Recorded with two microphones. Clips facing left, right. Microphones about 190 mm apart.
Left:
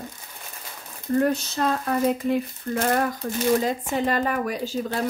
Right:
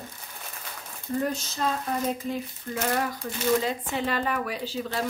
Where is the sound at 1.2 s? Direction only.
60° left (ahead or behind).